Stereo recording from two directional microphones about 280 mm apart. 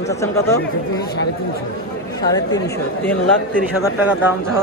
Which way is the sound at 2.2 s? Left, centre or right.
Centre.